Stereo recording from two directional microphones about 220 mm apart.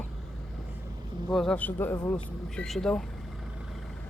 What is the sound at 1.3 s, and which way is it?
A man's voice, 5° left (ahead or behind).